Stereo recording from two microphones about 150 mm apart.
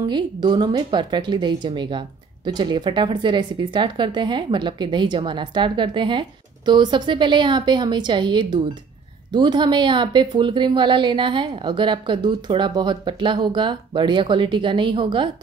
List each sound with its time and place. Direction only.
0.1 s speech: 30° right (ahead or behind)